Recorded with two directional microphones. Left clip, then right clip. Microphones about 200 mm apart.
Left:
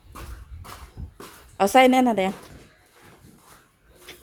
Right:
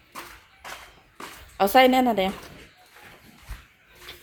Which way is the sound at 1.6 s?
15° left (ahead or behind).